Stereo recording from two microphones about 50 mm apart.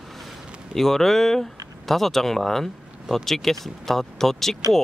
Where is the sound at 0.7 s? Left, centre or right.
Centre.